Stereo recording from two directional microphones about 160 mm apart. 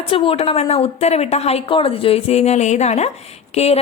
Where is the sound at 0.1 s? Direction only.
35° left (ahead or behind).